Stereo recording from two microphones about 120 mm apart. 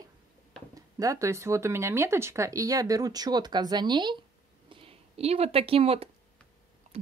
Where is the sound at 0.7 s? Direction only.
30° right (ahead or behind).